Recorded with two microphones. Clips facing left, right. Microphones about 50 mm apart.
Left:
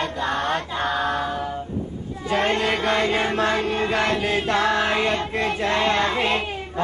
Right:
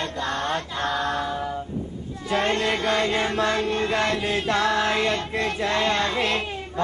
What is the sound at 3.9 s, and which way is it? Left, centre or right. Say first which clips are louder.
Chant: left 2 dB; left.